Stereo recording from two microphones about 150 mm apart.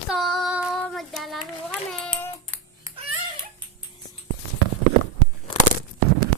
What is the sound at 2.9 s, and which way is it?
Music, 20° right (ahead or behind).